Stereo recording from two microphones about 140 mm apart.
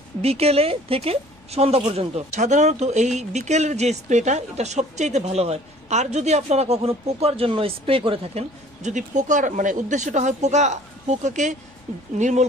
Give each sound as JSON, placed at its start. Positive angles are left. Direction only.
{"t": 0.2, "sound": "speech", "side_deg": -45}